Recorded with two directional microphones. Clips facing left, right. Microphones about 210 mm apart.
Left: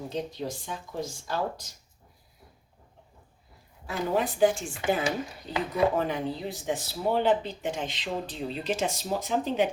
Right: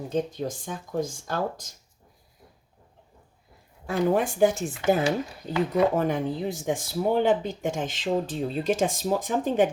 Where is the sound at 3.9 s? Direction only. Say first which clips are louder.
Right 5 dB; 45° right (ahead or behind).